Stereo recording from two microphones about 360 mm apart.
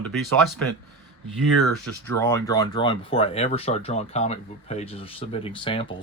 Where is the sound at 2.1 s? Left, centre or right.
Centre.